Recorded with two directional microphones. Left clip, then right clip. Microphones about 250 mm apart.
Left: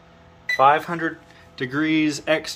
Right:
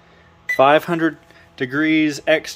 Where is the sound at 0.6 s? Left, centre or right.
Right.